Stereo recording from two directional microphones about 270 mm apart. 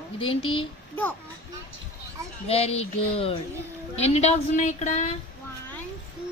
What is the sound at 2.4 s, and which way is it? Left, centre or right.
Speech, left.